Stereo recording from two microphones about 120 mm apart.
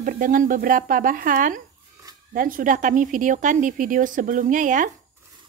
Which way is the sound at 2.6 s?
90° right.